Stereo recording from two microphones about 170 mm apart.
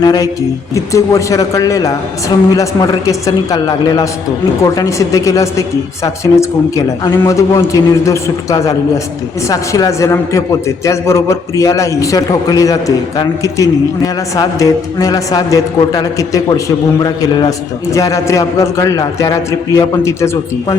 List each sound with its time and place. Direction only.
0.0 s a man's voice: 25° left (ahead or behind)